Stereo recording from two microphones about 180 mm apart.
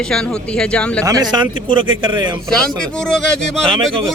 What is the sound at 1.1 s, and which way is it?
A man's voice, 20° right (ahead or behind).